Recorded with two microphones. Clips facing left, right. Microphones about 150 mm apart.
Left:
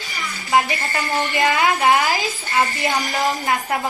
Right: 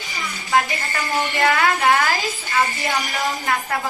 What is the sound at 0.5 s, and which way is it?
A woman's voice, 20° left (ahead or behind).